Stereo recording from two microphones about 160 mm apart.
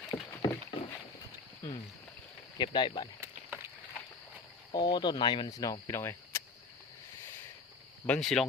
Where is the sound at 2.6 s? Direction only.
30° left (ahead or behind).